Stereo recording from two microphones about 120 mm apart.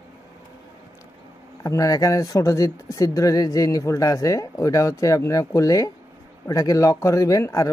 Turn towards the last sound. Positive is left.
turn(degrees=25)  # may be behind; listen again after turning